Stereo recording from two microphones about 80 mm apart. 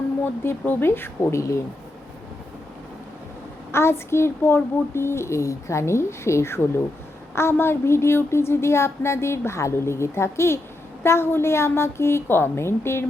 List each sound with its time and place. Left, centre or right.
0.4 s a woman's voice: left
3.7 s a woman's voice: left